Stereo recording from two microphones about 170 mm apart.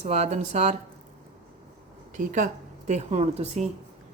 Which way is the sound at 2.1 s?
50° right (ahead or behind).